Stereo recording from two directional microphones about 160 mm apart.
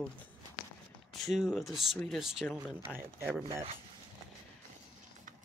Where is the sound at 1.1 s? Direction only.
Centre (ahead or behind).